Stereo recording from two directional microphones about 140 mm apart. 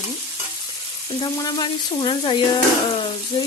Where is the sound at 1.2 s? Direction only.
30° left (ahead or behind).